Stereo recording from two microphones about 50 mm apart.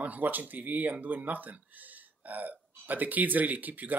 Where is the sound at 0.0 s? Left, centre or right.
Right.